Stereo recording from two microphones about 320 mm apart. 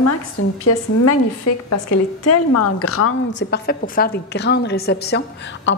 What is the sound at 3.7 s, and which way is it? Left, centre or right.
A woman's voice, left.